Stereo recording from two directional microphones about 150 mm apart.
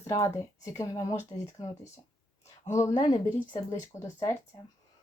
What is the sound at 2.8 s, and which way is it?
Speech, 25° left (ahead or behind).